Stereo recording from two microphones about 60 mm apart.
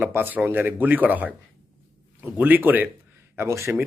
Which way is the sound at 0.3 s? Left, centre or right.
Right.